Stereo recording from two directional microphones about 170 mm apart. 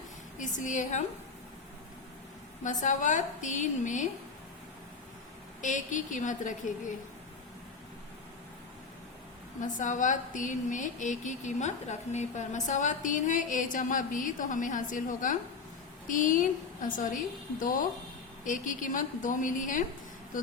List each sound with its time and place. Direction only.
0.3 s a woman's voice: 45° left (ahead or behind)
2.6 s a woman's voice: 45° left (ahead or behind)
5.6 s a woman's voice: 50° left (ahead or behind)
9.6 s a woman's voice: 50° left (ahead or behind)